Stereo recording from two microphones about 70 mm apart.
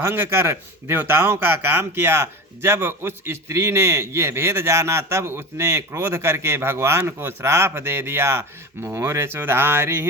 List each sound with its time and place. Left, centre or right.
0.0 s a man's voice: right